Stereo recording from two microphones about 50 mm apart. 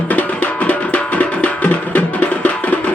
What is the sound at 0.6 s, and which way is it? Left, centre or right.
Music, left.